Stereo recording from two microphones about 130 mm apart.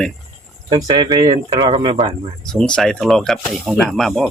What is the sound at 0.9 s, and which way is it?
Speech, 35° right (ahead or behind).